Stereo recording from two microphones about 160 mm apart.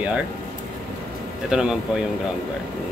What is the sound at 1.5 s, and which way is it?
Speech, 5° right (ahead or behind).